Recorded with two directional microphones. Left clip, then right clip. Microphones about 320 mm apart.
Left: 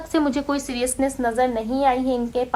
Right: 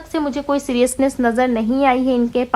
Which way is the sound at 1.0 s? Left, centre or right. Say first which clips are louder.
Right 5 dB; left.